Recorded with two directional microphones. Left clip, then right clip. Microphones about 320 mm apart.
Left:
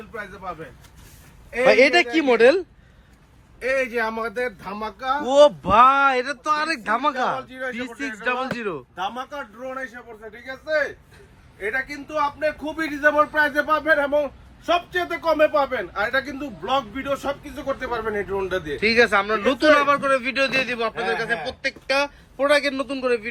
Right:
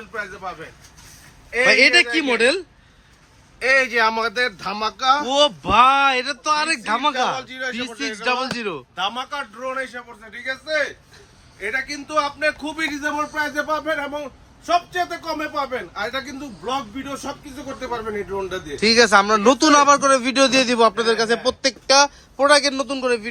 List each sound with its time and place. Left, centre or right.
1.5 s speech: centre
5.3 s speech: centre
7.3 s speech: centre
7.8 s speech: centre
11.6 s speech: centre